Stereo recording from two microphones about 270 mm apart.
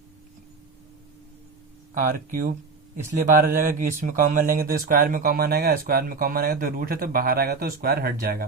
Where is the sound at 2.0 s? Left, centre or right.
Right.